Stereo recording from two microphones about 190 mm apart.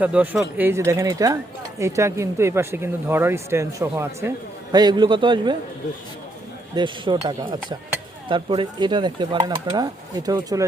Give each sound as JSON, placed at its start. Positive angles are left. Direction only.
{"t": 0.0, "sound": "speech", "side_deg": -5}
{"t": 6.7, "sound": "speech", "side_deg": -25}